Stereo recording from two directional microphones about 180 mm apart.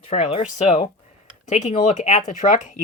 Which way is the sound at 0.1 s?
35° left (ahead or behind).